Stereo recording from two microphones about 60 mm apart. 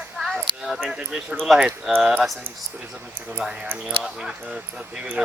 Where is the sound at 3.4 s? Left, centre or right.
Centre.